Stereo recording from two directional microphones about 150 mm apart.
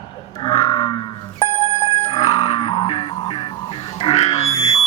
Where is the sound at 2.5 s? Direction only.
40° left (ahead or behind).